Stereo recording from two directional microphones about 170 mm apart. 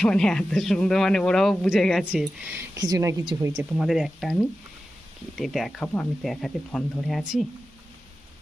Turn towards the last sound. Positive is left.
turn(degrees=0)  # may be behind; listen again after turning